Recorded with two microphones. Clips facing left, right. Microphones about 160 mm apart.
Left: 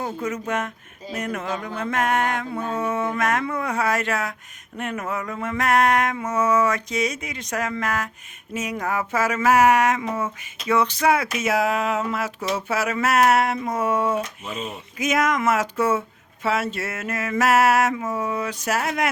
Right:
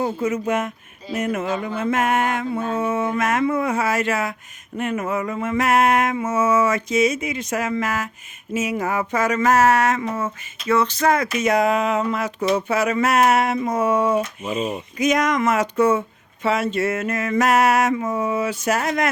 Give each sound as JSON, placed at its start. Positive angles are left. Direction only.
{"t": 0.0, "sound": "speech", "side_deg": -5}
{"t": 14.4, "sound": "speech", "side_deg": -20}
{"t": 14.9, "sound": "speech", "side_deg": 5}